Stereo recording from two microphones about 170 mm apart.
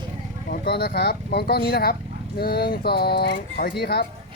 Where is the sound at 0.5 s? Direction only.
70° left (ahead or behind).